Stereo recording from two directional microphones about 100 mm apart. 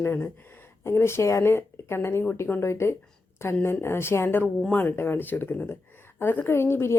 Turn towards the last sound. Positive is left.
turn(degrees=25)  # may be behind; listen again after turning